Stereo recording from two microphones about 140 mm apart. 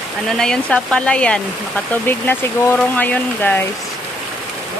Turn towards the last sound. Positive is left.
turn(degrees=10)  # may be behind; listen again after turning